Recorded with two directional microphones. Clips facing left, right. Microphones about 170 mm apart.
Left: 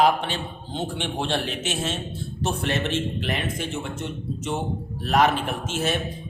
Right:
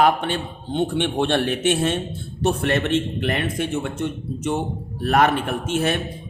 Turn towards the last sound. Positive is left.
turn(degrees=-60)  # may be behind; listen again after turning